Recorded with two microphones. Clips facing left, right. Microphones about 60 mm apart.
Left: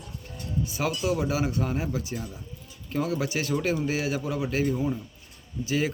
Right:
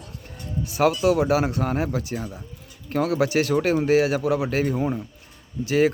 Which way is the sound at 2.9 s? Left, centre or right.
Right.